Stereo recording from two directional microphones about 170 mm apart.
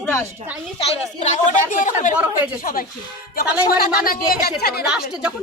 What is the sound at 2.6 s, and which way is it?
Speech, 55° left (ahead or behind).